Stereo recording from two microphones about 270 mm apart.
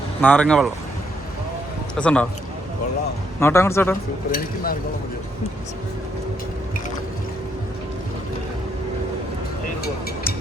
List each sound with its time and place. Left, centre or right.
0.2 s speech: centre
2.0 s speech: centre
3.4 s speech: centre
4.3 s speech: left